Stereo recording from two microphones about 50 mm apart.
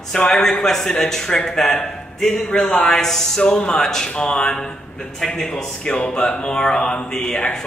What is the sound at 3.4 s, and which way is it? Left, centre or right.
A man's voice, centre.